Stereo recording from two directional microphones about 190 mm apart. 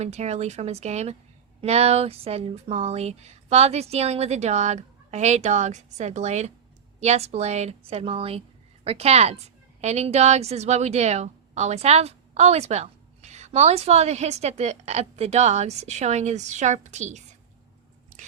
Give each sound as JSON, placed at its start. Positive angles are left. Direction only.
{"t": 0.0, "sound": "a woman's voice", "side_deg": -35}
{"t": 18.1, "sound": "biting", "side_deg": -45}